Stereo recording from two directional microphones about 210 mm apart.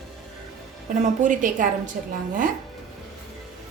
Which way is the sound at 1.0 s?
35° right (ahead or behind).